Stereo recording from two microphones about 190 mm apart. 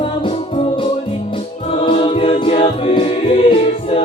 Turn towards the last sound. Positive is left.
turn(degrees=30)  # may be behind; listen again after turning